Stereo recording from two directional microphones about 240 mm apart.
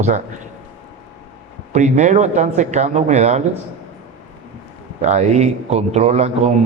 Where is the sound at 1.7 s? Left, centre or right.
Right.